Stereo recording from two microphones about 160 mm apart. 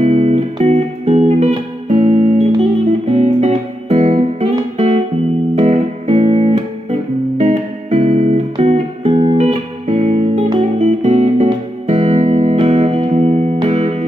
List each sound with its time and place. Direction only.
0.0 s music: 40° right (ahead or behind)
10.2 s music: 35° right (ahead or behind)
11.4 s music: 40° right (ahead or behind)